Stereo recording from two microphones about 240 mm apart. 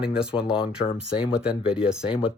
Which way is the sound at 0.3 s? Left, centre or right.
Left.